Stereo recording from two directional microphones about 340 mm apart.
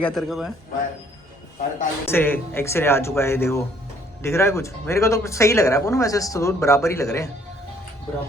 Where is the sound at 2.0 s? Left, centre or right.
Centre.